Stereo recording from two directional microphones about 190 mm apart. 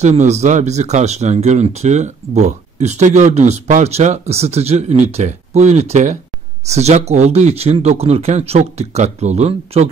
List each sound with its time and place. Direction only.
0.0 s speech: 35° right (ahead or behind)